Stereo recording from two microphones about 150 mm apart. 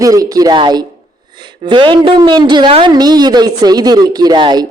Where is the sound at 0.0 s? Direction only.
25° right (ahead or behind).